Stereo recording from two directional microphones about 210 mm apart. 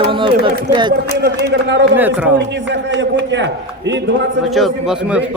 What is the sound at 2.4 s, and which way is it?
A man's voice, 60° right (ahead or behind).